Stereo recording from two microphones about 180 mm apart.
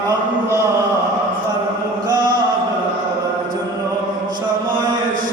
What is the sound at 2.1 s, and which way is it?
Music, 25° right (ahead or behind).